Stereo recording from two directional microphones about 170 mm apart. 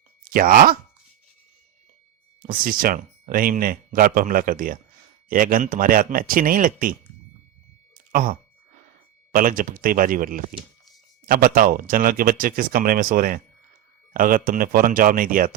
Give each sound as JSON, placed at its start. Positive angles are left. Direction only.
{"t": 0.3, "sound": "speech", "side_deg": -55}
{"t": 2.5, "sound": "speech", "side_deg": -55}
{"t": 8.1, "sound": "speech", "side_deg": -55}